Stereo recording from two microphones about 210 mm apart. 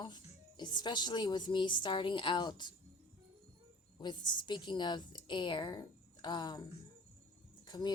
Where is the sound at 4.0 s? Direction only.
20° left (ahead or behind).